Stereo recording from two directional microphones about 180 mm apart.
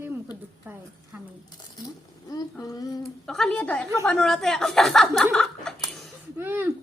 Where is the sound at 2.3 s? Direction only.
20° left (ahead or behind).